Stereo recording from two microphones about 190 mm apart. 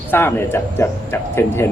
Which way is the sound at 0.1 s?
10° left (ahead or behind).